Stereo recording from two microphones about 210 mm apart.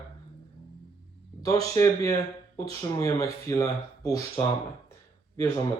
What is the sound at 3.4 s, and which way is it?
Speech, 15° left (ahead or behind).